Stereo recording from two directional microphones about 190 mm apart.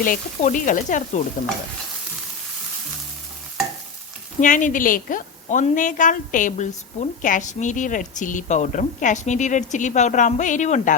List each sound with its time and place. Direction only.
0.0 s sizzle: 45° left (ahead or behind)
4.4 s a woman's voice: 40° left (ahead or behind)